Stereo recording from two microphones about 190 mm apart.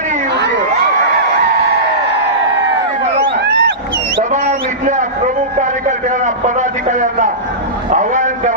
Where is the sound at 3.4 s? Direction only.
60° right (ahead or behind).